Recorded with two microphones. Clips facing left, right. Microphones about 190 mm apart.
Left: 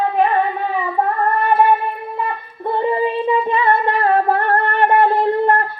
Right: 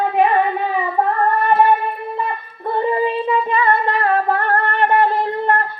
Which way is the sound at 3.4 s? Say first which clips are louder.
Left 1 dB; 25° left (ahead or behind).